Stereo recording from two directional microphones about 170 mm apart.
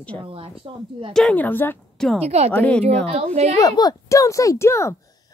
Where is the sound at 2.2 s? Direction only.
40° right (ahead or behind).